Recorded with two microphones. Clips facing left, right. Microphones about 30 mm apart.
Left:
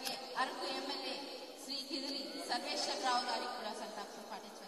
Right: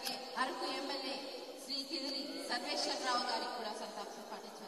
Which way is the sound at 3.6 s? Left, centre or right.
Left.